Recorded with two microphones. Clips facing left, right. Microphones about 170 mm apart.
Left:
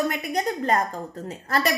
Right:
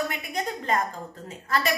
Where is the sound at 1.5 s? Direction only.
40° left (ahead or behind).